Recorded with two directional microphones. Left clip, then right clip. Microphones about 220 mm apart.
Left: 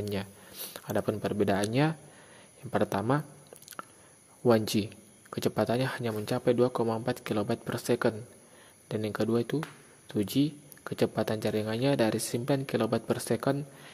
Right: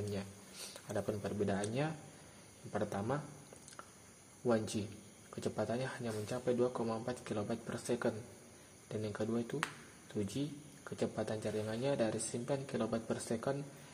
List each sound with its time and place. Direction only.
0.1 s speech: 40° left (ahead or behind)
4.5 s speech: 40° left (ahead or behind)